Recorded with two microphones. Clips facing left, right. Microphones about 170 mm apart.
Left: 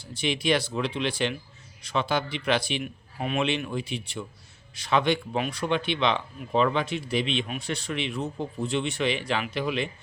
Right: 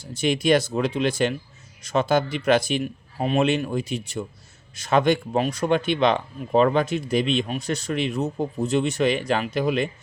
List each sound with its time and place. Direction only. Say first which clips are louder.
0.0 s speech: right 5 dB; 45° right (ahead or behind)